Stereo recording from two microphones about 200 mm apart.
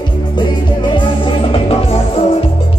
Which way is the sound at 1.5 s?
30° left (ahead or behind).